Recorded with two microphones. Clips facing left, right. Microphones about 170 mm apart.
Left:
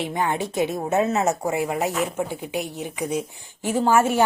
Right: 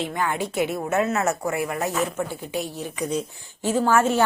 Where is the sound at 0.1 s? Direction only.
20° left (ahead or behind).